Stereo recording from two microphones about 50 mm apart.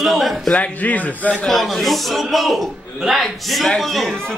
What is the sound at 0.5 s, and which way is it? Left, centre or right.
Speech, left.